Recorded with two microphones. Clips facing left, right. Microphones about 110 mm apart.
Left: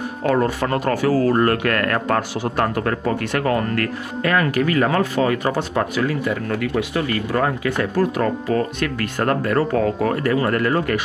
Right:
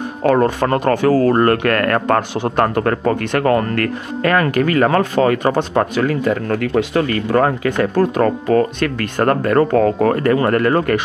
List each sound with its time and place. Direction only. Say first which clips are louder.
0.2 s speech: right 5 dB; 50° right (ahead or behind)